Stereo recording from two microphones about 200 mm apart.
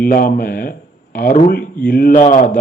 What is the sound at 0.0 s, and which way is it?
A man's voice, 45° left (ahead or behind).